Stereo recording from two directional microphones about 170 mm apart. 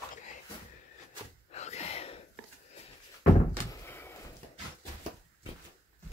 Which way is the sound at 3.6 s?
15° left (ahead or behind).